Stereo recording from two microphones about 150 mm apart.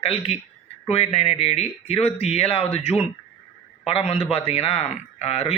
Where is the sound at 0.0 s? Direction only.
45° left (ahead or behind).